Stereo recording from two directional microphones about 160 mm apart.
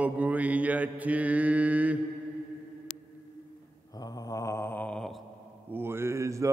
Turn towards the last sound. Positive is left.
turn(degrees=-20)  # may be behind; listen again after turning